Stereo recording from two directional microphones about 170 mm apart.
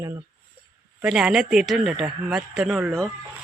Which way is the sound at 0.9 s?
5° right (ahead or behind).